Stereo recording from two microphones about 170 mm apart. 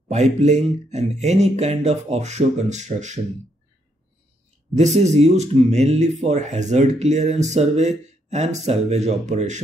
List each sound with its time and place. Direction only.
0.1 s speech: 40° right (ahead or behind)
4.7 s speech: 40° right (ahead or behind)